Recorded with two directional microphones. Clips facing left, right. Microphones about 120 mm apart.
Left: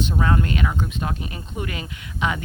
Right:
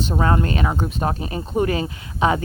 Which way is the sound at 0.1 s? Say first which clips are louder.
Right 6 dB; 35° right (ahead or behind).